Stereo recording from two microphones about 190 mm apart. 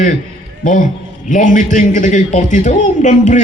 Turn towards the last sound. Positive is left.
turn(degrees=40)  # may be behind; listen again after turning